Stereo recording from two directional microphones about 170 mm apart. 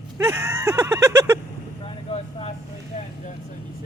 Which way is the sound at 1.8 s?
35° left (ahead or behind).